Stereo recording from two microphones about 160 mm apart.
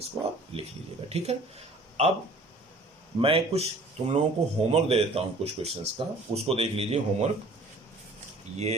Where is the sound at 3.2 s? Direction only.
35° right (ahead or behind).